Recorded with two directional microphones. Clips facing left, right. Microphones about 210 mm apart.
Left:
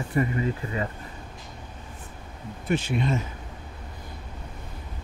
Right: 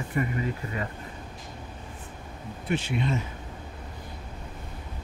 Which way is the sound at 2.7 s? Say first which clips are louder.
Left 3 dB; 45° left (ahead or behind).